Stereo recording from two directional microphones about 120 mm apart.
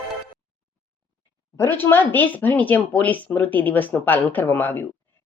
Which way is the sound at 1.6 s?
20° left (ahead or behind).